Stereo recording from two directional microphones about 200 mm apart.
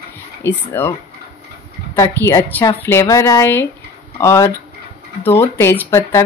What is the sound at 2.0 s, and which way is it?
A woman's voice, 15° left (ahead or behind).